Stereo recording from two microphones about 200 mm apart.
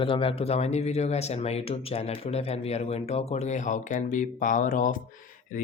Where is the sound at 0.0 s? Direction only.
25° left (ahead or behind).